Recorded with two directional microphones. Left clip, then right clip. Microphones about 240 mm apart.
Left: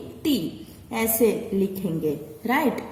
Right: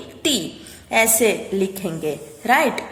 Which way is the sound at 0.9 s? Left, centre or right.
Centre.